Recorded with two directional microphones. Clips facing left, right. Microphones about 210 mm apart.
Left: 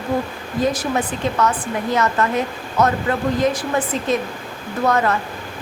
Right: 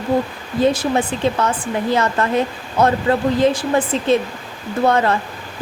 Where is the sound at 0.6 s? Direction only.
30° right (ahead or behind).